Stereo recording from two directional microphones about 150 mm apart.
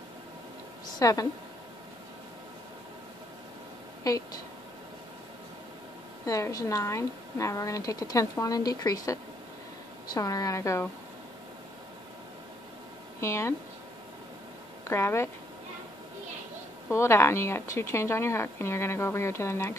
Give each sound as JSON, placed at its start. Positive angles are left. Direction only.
{"t": 0.9, "sound": "a woman's voice", "side_deg": 25}
{"t": 4.0, "sound": "speech", "side_deg": 25}
{"t": 6.2, "sound": "speech", "side_deg": 20}
{"t": 13.2, "sound": "speech", "side_deg": 20}
{"t": 14.9, "sound": "speech", "side_deg": 15}
{"t": 16.9, "sound": "speech", "side_deg": 20}